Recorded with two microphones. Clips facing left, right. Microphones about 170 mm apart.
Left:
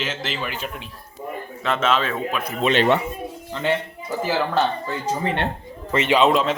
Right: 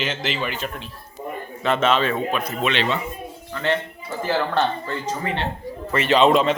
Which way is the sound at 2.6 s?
45° left (ahead or behind).